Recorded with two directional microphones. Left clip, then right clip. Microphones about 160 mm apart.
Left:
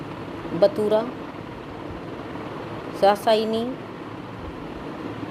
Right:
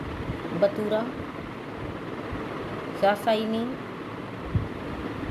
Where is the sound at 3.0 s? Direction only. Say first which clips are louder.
Left 5 dB; 40° left (ahead or behind).